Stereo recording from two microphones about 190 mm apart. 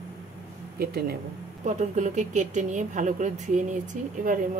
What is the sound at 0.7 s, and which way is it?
Speech, 55° right (ahead or behind).